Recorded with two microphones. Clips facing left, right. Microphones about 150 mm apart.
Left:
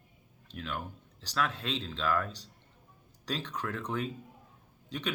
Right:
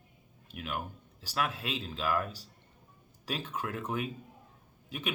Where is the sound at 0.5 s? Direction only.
15° right (ahead or behind).